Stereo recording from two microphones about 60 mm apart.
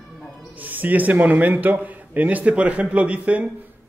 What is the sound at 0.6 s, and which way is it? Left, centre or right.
Speech, right.